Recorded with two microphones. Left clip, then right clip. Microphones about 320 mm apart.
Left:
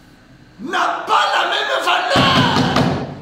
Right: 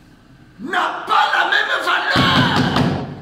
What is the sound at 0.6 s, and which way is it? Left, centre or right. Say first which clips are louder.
Crowd: left 1 dB; centre.